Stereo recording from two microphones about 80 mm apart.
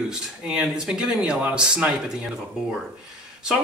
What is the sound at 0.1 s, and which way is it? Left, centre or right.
Speech, centre.